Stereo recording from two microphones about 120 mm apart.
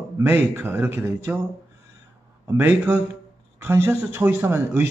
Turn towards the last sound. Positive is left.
turn(degrees=-20)  # may be behind; listen again after turning